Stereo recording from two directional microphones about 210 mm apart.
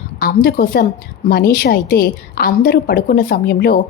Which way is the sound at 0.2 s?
45° left (ahead or behind).